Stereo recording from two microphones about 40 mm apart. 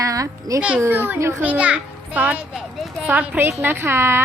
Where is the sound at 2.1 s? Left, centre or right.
Right.